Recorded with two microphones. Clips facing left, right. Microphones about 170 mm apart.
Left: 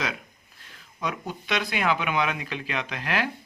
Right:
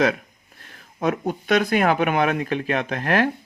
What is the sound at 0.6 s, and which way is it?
Speech, 50° right (ahead or behind).